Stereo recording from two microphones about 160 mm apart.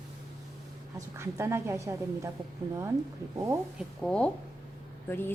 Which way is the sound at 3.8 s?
5° left (ahead or behind).